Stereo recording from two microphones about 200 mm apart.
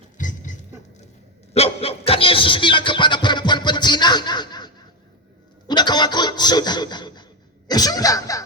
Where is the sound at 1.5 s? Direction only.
30° left (ahead or behind).